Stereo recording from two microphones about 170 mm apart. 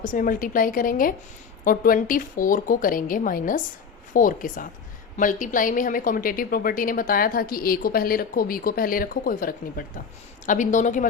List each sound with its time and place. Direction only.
0.0 s a woman's voice: 50° left (ahead or behind)